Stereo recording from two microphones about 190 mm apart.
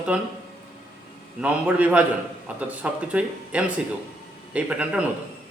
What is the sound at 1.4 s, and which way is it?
Speech, 5° right (ahead or behind).